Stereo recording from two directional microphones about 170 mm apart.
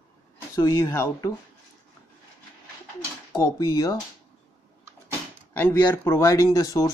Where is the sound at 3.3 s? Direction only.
20° left (ahead or behind).